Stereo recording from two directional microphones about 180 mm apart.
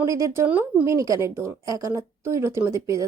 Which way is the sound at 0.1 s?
15° right (ahead or behind).